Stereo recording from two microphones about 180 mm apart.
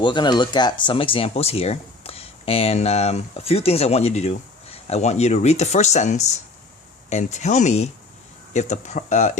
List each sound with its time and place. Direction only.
0.0 s speech: 25° left (ahead or behind); by 9.4 s 40° left (ahead or behind)